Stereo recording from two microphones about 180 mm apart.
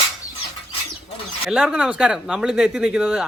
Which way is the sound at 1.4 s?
Centre (ahead or behind).